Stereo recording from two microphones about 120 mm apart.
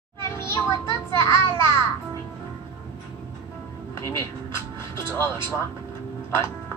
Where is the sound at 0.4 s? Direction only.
25° left (ahead or behind).